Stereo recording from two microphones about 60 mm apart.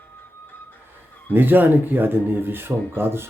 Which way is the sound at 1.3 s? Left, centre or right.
Right.